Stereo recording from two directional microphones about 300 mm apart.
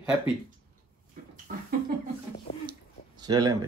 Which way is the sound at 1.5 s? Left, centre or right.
Right.